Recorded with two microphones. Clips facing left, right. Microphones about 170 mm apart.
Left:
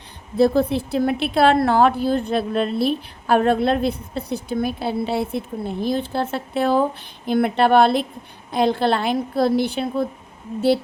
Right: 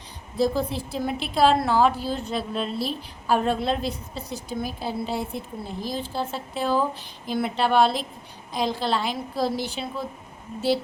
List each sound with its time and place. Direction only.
0.3 s a woman's voice: 60° left (ahead or behind)